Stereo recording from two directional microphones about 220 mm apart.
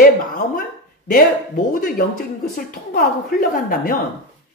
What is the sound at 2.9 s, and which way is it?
A woman's voice, 40° left (ahead or behind).